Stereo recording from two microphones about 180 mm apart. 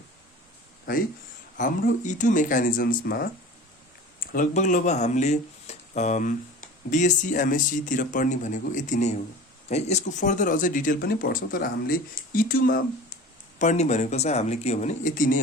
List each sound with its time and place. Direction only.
1.5 s speech: 45° left (ahead or behind)
13.6 s speech: 40° left (ahead or behind)